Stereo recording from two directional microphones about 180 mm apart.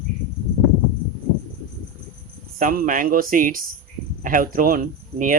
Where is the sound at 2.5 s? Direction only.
50° right (ahead or behind).